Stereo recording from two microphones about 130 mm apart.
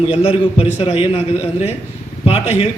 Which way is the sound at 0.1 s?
50° left (ahead or behind).